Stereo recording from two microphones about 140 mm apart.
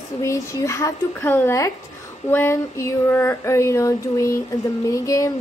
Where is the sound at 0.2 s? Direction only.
20° left (ahead or behind).